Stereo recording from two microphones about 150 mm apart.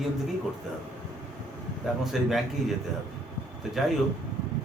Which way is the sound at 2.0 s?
Centre (ahead or behind).